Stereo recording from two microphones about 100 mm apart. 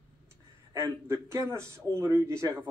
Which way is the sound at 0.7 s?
30° right (ahead or behind).